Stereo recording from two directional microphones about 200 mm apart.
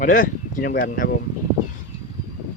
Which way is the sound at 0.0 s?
40° left (ahead or behind).